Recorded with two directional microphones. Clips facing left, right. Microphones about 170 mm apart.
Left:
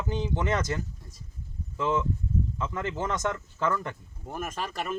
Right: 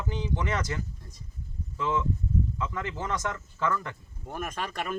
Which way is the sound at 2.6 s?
20° left (ahead or behind).